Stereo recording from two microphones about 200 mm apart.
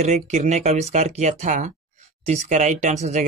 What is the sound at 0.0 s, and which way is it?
Speech, 35° right (ahead or behind).